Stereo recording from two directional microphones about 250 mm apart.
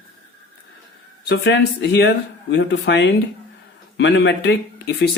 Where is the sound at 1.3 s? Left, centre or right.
Left.